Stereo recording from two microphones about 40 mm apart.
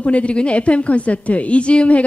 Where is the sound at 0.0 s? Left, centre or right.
Left.